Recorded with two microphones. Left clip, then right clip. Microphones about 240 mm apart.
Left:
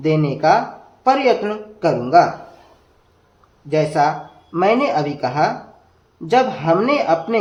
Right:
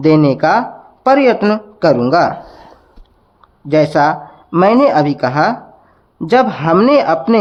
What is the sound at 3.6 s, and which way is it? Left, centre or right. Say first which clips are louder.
A man's voice: right 5 dB; right.